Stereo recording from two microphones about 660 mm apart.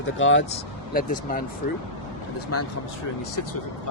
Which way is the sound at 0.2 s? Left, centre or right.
Centre.